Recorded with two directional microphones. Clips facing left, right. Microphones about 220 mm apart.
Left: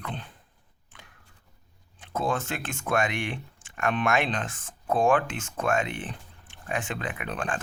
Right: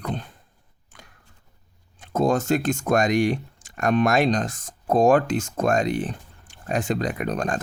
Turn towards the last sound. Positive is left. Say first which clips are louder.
# right 7 dB
turn(degrees=-40)  # may be behind; listen again after turning